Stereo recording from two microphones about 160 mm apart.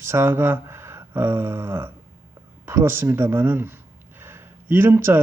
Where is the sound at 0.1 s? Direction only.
15° right (ahead or behind).